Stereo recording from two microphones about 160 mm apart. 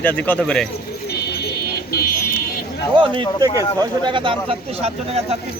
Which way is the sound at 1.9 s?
75° left (ahead or behind).